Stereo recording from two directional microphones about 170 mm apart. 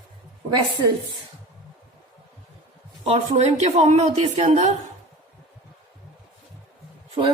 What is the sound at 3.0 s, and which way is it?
A woman's voice, 40° right (ahead or behind).